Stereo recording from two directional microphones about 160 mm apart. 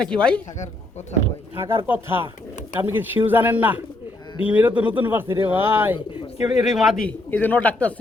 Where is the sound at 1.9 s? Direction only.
15° right (ahead or behind).